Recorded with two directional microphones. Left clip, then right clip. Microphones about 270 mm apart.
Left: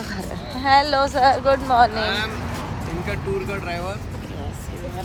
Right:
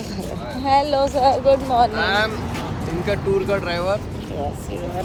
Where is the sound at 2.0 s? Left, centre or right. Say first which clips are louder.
Right 4 dB; centre.